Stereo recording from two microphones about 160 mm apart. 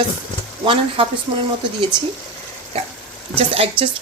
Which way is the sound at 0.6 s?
35° right (ahead or behind).